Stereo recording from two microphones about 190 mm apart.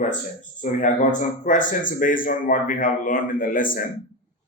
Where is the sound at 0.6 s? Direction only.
40° left (ahead or behind).